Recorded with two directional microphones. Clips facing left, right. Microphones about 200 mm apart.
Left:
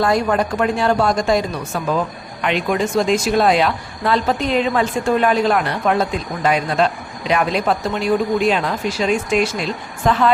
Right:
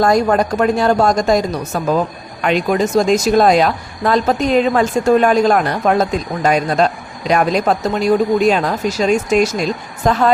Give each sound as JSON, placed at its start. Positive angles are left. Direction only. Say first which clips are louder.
{"t": 0.0, "sound": "speech", "louder": "right 4 dB", "side_deg": -40}